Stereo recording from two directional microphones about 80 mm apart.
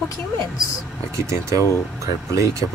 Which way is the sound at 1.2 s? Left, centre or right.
Right.